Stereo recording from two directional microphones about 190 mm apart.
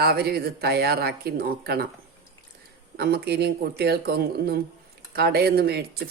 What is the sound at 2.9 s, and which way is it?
Speech, 55° right (ahead or behind).